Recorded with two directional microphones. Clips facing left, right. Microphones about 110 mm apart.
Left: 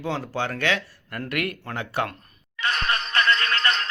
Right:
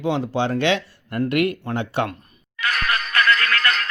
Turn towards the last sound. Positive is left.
turn(degrees=25)  # may be behind; listen again after turning